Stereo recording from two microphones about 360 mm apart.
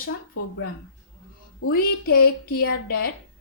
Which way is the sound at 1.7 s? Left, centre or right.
Left.